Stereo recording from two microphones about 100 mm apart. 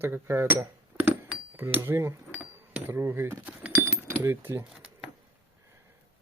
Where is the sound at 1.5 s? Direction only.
20° right (ahead or behind).